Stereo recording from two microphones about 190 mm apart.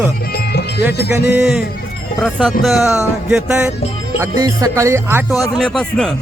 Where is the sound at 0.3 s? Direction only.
60° left (ahead or behind).